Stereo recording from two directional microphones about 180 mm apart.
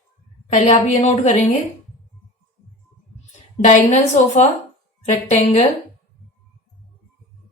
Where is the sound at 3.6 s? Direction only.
40° left (ahead or behind).